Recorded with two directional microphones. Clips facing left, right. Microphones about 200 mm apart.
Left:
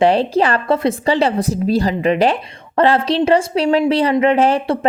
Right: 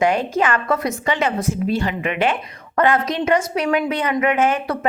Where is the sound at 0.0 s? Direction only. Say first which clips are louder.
Left 5 dB; 35° left (ahead or behind).